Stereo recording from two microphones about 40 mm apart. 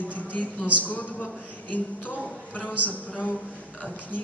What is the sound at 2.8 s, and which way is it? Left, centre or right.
Speech, left.